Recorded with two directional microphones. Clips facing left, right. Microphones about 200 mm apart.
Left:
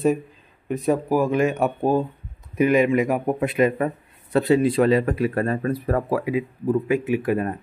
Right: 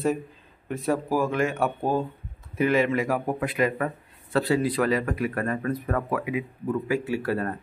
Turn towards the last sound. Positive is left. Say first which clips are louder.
# left 5 dB
turn(degrees=15)  # may be behind; listen again after turning